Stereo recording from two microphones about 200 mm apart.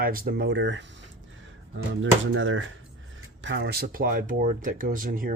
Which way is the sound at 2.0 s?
75° right (ahead or behind).